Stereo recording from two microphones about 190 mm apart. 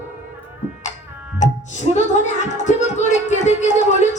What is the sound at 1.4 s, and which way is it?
Music, 40° left (ahead or behind).